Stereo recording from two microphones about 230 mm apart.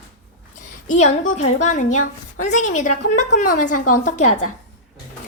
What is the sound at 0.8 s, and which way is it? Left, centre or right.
A woman's voice, left.